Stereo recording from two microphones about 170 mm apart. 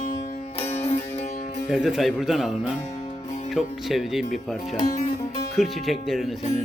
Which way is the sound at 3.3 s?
45° left (ahead or behind).